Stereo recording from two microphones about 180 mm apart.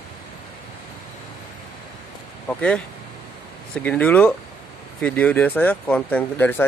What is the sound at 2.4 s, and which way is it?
Speech, 5° left (ahead or behind).